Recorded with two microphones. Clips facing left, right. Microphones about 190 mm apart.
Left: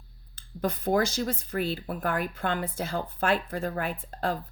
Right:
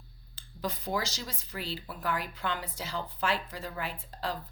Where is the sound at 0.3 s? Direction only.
55° left (ahead or behind).